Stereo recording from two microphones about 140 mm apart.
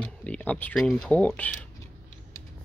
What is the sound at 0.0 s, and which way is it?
Mechanisms, 10° left (ahead or behind).